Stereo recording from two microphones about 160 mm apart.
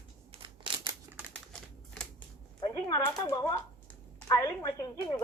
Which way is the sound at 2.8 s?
25° left (ahead or behind).